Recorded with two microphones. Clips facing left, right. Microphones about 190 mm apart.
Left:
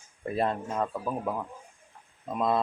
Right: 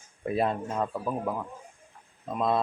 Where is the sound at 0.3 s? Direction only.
5° right (ahead or behind).